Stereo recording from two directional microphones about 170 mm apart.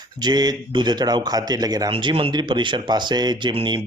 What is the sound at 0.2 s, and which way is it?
Speech, 25° right (ahead or behind).